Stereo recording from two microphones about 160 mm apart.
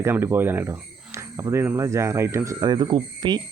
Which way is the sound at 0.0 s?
15° right (ahead or behind).